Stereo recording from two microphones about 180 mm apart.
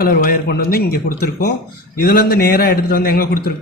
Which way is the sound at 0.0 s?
55° left (ahead or behind).